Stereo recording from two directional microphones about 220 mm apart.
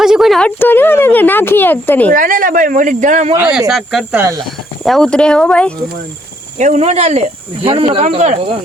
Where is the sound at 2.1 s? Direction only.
40° right (ahead or behind).